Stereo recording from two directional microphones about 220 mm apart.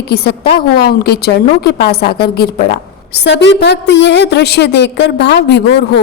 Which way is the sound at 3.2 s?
50° left (ahead or behind).